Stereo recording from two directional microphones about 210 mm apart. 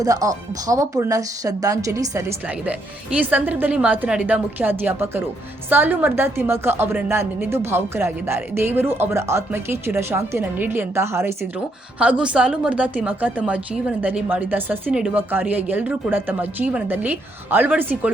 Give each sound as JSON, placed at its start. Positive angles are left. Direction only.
{"t": 0.0, "sound": "a woman's voice", "side_deg": -15}